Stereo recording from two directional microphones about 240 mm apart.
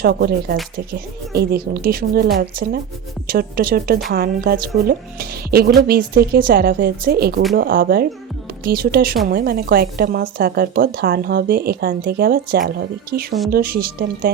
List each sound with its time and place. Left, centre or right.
0.0 s speech: right